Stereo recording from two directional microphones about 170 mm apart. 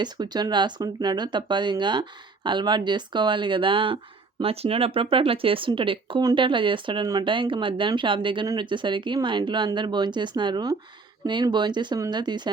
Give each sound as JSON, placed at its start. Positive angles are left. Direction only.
{"t": 0.0, "sound": "speech", "side_deg": -25}